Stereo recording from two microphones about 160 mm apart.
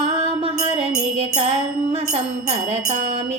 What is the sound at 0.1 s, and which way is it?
Music, 35° right (ahead or behind).